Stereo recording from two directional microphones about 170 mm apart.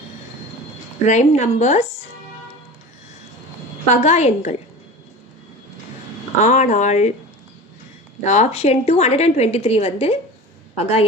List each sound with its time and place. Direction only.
1.0 s a woman's voice: 40° left (ahead or behind)
4.0 s a woman's voice: 40° left (ahead or behind)
6.4 s speech: 40° left (ahead or behind)
8.2 s a woman's voice: 40° left (ahead or behind)